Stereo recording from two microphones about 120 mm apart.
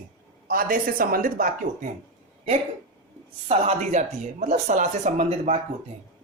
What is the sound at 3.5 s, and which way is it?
Speech, 65° right (ahead or behind).